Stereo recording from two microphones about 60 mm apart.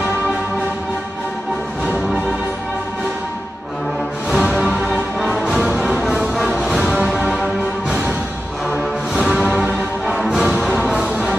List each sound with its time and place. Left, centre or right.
4.3 s music: centre
6.3 s music: centre
7.1 s music: centre
9.3 s music: centre